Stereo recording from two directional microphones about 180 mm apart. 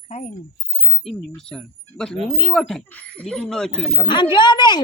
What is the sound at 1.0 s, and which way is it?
Speech, centre (ahead or behind).